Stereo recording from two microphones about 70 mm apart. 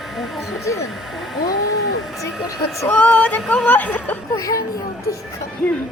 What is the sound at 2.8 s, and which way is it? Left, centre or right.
Female singing, left.